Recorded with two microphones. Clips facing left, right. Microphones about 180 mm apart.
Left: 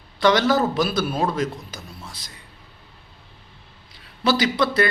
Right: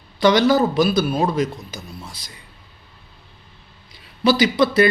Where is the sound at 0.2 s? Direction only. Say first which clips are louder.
Right 3 dB; centre (ahead or behind).